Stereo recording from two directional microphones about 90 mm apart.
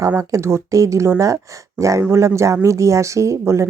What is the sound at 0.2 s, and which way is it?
Speech, 35° right (ahead or behind).